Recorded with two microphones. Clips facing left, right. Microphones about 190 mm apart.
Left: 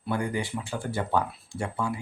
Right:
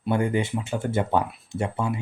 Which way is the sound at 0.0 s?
25° right (ahead or behind).